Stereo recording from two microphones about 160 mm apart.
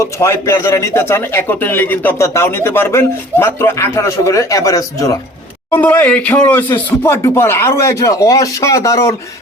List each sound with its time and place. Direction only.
0.0 s a man's voice: 15° left (ahead or behind)